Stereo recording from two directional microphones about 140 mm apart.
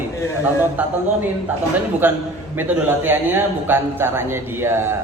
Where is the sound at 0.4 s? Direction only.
10° right (ahead or behind).